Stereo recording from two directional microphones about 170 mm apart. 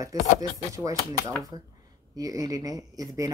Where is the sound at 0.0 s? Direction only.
20° right (ahead or behind).